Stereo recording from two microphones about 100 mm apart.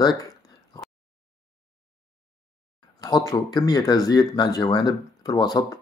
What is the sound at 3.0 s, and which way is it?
Speech, 40° left (ahead or behind).